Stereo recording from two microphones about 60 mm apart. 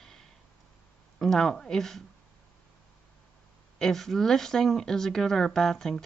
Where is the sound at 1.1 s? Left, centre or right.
Centre.